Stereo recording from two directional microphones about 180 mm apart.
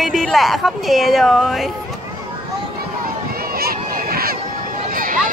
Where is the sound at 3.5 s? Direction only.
55° right (ahead or behind).